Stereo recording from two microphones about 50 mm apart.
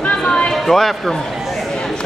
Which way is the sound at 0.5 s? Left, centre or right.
Centre.